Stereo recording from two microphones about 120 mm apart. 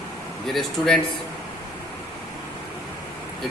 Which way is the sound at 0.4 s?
Centre (ahead or behind).